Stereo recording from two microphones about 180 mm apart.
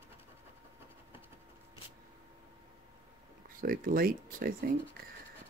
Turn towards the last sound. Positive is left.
turn(degrees=-50)  # may be behind; listen again after turning